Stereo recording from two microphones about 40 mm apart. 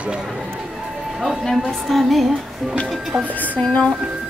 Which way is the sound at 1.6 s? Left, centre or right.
Centre.